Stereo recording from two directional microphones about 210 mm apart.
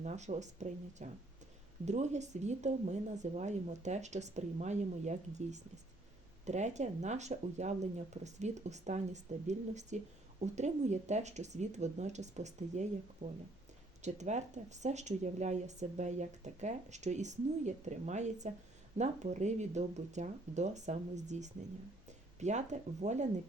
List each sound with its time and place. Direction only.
0.0 s speech: 35° right (ahead or behind)